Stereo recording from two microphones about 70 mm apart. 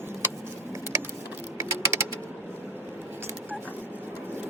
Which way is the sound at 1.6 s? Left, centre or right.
Right.